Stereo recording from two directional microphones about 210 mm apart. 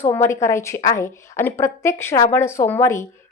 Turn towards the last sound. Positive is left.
turn(degrees=15)  # may be behind; listen again after turning